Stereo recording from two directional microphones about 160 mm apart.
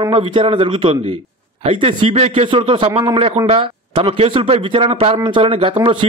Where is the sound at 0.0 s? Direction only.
30° right (ahead or behind).